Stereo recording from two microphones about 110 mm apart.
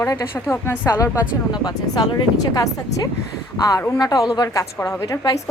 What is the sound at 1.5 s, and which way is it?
A woman's voice, 40° left (ahead or behind).